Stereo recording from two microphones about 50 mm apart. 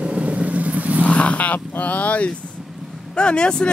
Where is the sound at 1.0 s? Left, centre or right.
Left.